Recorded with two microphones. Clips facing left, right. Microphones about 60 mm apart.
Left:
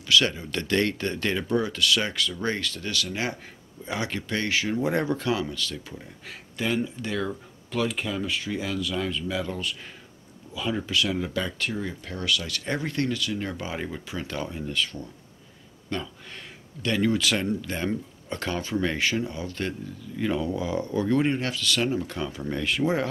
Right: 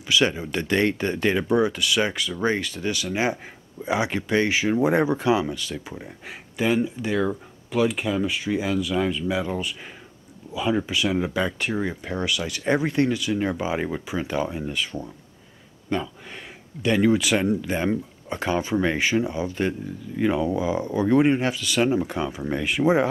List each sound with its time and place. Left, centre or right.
0.1 s speech: centre